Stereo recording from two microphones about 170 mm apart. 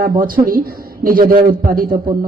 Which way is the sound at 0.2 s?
55° right (ahead or behind).